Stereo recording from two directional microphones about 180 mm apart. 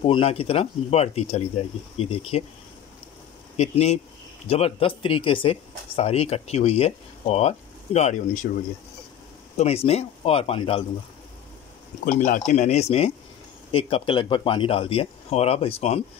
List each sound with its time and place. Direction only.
0.0 s speech: 30° left (ahead or behind)
3.5 s speech: 35° left (ahead or behind)
9.6 s speech: 35° left (ahead or behind)
12.0 s speech: 45° left (ahead or behind)